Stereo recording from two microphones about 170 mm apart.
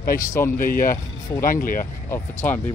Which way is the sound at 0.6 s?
55° left (ahead or behind).